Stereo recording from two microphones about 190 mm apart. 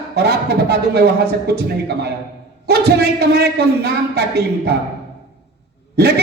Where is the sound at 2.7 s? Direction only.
60° right (ahead or behind).